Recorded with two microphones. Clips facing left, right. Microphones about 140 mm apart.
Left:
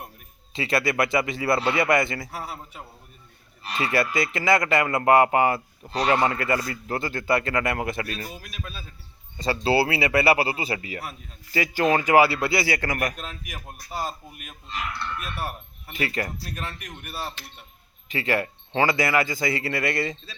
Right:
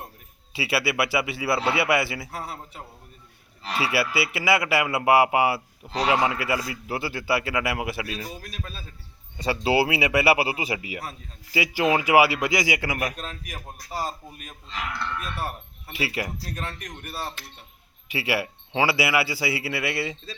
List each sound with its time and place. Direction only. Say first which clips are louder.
0.5 s a man's voice: left 1 dB; 5° right (ahead or behind)
2.3 s speech: even; 5° left (ahead or behind)
3.6 s speech: right 1 dB; 90° right
3.9 s a man's voice: left 3 dB; 5° right (ahead or behind)
8.4 s a man's voice: right 1 dB; 35° right (ahead or behind)
9.4 s a man's voice: even; 15° right (ahead or behind)
13.1 s speech: right 1 dB; 5° left (ahead or behind)
15.9 s a man's voice: left 1 dB; 10° right (ahead or behind)
16.6 s speech: right 1 dB; 5° left (ahead or behind)
18.1 s a man's voice: left 1 dB; 10° right (ahead or behind)